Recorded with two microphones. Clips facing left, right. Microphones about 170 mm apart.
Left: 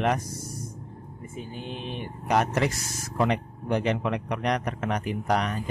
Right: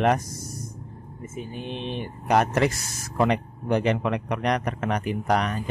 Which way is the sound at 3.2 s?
60° right (ahead or behind).